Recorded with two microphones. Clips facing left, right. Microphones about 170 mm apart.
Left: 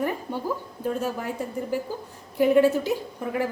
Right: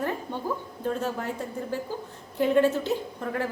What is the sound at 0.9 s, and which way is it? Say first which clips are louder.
A woman's voice: left 2 dB; 10° left (ahead or behind).